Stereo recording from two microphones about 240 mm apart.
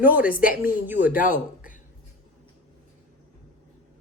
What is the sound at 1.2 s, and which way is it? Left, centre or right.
Speech, left.